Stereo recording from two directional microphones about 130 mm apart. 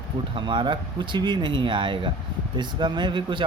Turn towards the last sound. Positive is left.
turn(degrees=-35)  # may be behind; listen again after turning